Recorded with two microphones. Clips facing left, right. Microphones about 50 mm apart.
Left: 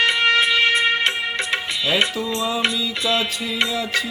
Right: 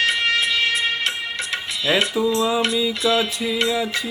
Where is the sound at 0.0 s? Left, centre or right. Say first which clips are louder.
Left 3 dB; left.